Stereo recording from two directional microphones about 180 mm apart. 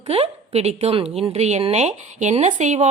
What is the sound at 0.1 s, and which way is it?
A woman's voice, 35° right (ahead or behind).